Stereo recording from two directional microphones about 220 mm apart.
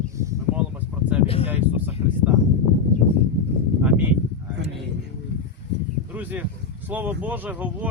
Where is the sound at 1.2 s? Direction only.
25° left (ahead or behind).